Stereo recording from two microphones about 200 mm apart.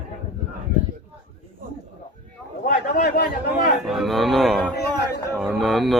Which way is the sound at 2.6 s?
45° left (ahead or behind).